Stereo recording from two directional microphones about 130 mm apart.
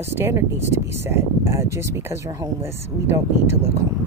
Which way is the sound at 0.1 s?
20° right (ahead or behind).